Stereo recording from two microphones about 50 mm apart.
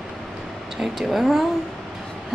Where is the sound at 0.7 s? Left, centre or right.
Centre.